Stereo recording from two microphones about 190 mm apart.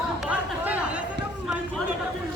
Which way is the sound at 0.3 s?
5° right (ahead or behind).